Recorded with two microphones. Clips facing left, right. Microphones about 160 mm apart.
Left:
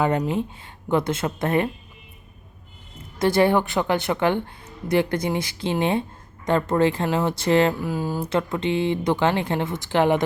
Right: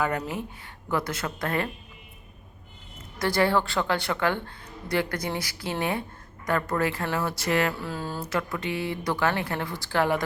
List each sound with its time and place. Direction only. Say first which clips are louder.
0.0 s speech: left 6 dB; 25° left (ahead or behind)
3.2 s speech: left 5 dB; 25° left (ahead or behind)
7.7 s speech: left 7 dB; 15° left (ahead or behind)
8.2 s speech: left 4 dB; 25° left (ahead or behind)